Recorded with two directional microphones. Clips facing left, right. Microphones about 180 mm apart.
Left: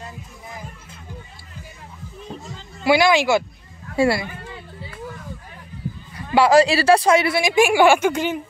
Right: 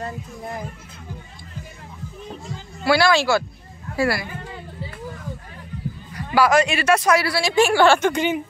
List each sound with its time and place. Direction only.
2.8 s a woman's voice: 15° left (ahead or behind)
6.1 s a woman's voice: 25° left (ahead or behind); by 8.4 s 5° left (ahead or behind)